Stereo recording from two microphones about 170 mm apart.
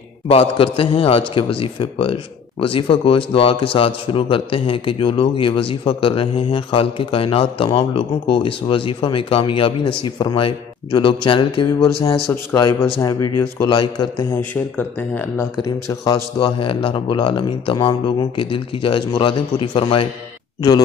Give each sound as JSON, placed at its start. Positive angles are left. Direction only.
{"t": 0.3, "sound": "a man's voice", "side_deg": 35}
{"t": 12.3, "sound": "a man's voice", "side_deg": 20}
{"t": 15.6, "sound": "speech", "side_deg": 20}